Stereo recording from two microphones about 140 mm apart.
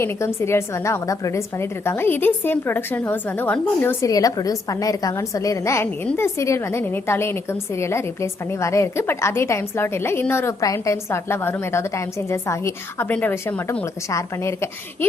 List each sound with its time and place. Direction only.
0.0 s a woman's voice: 20° left (ahead or behind)
4.0 s a woman's voice: 25° left (ahead or behind)